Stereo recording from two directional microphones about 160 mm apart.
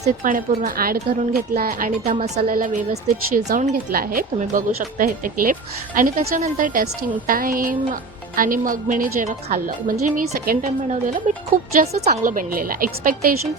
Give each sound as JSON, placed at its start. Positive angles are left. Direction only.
{"t": 0.0, "sound": "speech", "side_deg": -55}
{"t": 2.0, "sound": "speech", "side_deg": -45}
{"t": 2.4, "sound": "speech", "side_deg": -60}
{"t": 10.8, "sound": "speech", "side_deg": -50}